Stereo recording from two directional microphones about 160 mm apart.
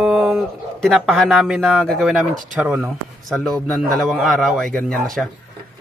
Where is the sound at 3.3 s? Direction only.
Centre (ahead or behind).